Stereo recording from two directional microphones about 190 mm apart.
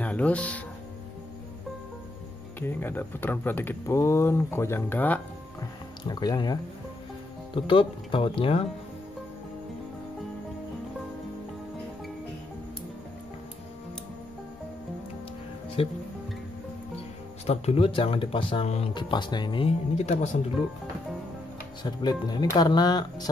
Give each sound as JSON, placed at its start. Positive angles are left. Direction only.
{"t": 0.0, "sound": "speech", "side_deg": 5}
{"t": 2.6, "sound": "speech", "side_deg": 10}
{"t": 6.0, "sound": "speech", "side_deg": 20}
{"t": 15.8, "sound": "speech", "side_deg": 30}
{"t": 17.5, "sound": "speech", "side_deg": 30}
{"t": 21.8, "sound": "speech", "side_deg": 20}